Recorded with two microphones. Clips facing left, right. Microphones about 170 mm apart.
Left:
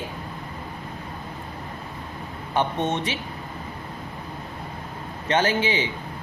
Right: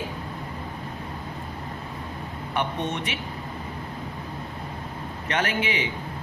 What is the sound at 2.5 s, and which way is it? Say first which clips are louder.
Speech: left 4 dB; 30° left (ahead or behind).